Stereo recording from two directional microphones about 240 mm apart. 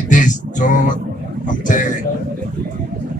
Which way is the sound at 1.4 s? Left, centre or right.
Left.